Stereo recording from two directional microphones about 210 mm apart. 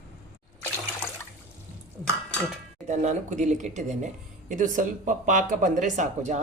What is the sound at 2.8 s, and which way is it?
Speech, 35° right (ahead or behind).